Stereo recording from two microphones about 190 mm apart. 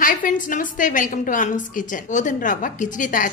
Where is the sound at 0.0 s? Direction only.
45° left (ahead or behind).